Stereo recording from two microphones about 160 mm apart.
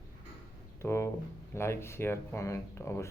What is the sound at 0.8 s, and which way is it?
Speech, 15° left (ahead or behind).